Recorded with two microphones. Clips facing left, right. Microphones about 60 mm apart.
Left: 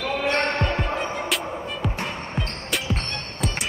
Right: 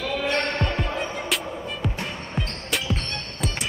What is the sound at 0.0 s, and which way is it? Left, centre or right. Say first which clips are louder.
Heart sounds: left 2 dB; left.